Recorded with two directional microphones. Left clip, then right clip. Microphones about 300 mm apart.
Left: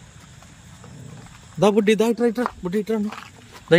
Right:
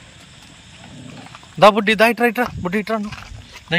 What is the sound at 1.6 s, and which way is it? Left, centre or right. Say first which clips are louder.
Speech: right 6 dB; centre.